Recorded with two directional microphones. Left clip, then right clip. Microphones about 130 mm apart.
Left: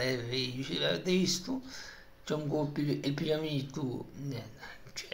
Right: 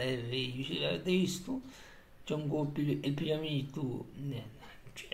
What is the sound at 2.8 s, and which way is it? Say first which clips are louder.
Speech: left 1 dB; 45° left (ahead or behind).